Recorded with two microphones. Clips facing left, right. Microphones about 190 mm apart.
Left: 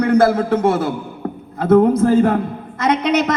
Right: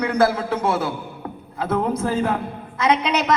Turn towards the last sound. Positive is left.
turn(degrees=50)  # may be behind; listen again after turning